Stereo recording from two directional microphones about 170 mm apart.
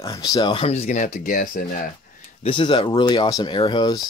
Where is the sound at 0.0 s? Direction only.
20° left (ahead or behind); by 1.9 s 55° left (ahead or behind).